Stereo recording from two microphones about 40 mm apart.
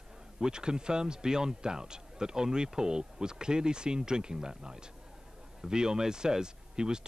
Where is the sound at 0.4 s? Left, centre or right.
Centre.